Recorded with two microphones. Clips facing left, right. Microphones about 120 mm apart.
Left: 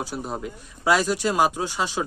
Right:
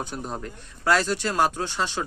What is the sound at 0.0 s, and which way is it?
Speech, 5° left (ahead or behind).